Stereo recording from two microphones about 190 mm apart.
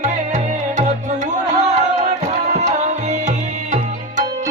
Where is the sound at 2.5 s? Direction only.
35° right (ahead or behind).